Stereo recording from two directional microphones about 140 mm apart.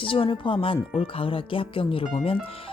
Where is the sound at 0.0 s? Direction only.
40° left (ahead or behind).